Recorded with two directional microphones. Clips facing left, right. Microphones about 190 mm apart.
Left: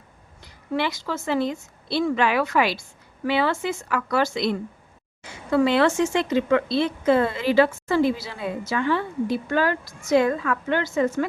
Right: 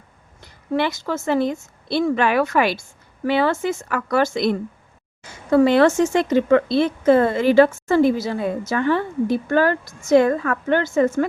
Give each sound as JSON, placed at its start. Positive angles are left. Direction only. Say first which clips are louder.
{"t": 0.4, "sound": "speech", "louder": "right 4 dB", "side_deg": -50}